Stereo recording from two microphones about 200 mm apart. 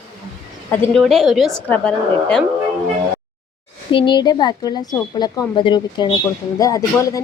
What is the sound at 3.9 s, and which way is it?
Speech, 25° left (ahead or behind).